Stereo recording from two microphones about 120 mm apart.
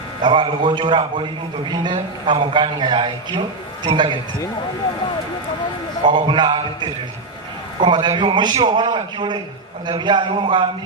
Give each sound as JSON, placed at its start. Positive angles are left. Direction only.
{"t": 0.2, "sound": "a man's voice", "side_deg": -40}
{"t": 6.1, "sound": "a man's voice", "side_deg": -40}